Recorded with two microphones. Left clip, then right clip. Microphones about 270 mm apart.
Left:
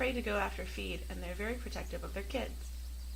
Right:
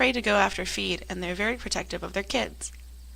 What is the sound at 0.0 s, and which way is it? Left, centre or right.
Speech, right.